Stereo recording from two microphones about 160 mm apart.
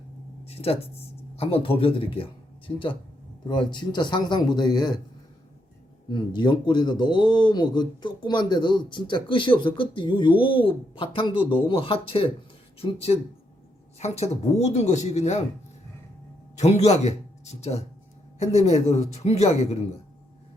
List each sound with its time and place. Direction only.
0.4 s speech: 40° left (ahead or behind)
6.1 s speech: 30° left (ahead or behind)
14.0 s speech: 45° left (ahead or behind)
16.6 s speech: 45° left (ahead or behind)